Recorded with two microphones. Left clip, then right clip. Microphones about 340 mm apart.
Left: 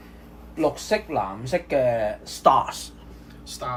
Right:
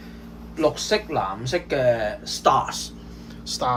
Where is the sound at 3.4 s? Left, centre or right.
Centre.